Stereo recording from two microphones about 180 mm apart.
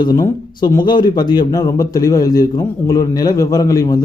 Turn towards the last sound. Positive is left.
turn(degrees=20)  # may be behind; listen again after turning